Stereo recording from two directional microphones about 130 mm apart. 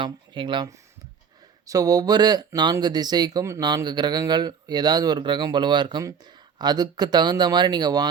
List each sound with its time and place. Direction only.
0.0 s speech: 35° right (ahead or behind)